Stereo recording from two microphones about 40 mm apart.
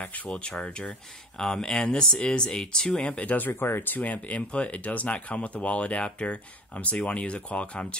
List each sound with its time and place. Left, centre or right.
0.3 s speech: left
3.2 s speech: left
3.9 s speech: left